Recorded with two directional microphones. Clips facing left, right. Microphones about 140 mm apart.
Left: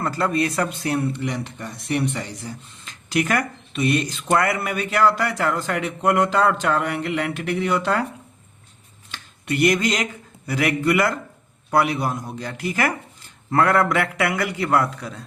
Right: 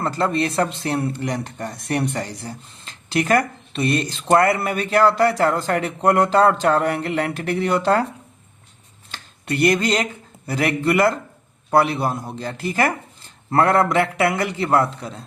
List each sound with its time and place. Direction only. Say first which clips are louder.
0.0 s speech: right 1 dB; 30° right (ahead or behind)
9.1 s a man's voice: even; 35° right (ahead or behind)